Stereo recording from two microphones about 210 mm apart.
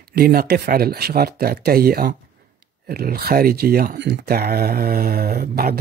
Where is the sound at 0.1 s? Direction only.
45° right (ahead or behind).